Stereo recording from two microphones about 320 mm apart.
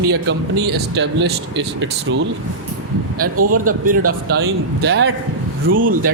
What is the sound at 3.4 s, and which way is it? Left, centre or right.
Speech, right.